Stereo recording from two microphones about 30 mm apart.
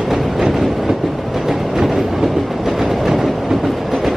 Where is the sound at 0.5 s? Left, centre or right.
Centre.